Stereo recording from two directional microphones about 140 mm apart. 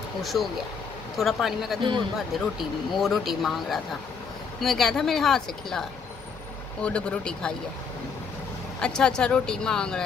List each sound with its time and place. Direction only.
0.2 s speech: centre (ahead or behind)
1.8 s a man's voice: 35° right (ahead or behind)
3.0 s speech: centre (ahead or behind)
8.8 s speech: 5° left (ahead or behind)